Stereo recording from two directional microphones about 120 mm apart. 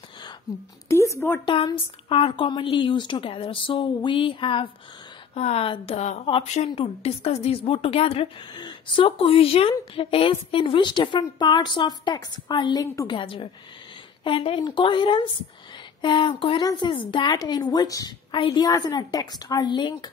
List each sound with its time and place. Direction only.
0.8 s speech: 25° left (ahead or behind)
1.4 s a woman's voice: 40° left (ahead or behind)
5.3 s a woman's voice: 60° left (ahead or behind)
8.5 s a woman's voice: 40° left (ahead or behind)